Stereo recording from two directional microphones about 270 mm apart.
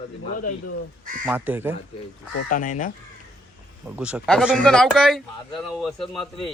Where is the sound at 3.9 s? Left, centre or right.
Centre.